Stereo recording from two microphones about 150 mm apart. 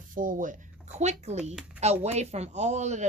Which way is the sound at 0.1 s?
65° right (ahead or behind).